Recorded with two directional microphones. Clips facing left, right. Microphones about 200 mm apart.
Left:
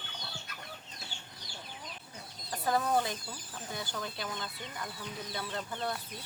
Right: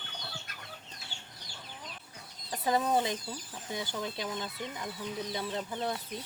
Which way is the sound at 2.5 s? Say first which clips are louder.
Right 1 dB; 20° right (ahead or behind).